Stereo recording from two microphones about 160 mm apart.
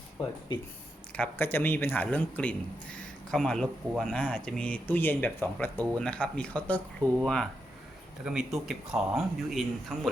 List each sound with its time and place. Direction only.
0.2 s speech: 35° left (ahead or behind)
1.1 s speech: 10° left (ahead or behind)